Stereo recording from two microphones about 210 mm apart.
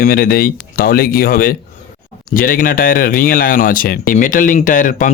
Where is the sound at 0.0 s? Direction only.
45° left (ahead or behind).